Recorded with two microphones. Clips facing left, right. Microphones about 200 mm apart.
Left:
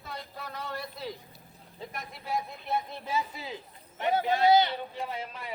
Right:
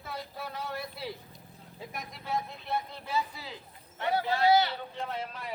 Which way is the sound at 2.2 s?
15° left (ahead or behind).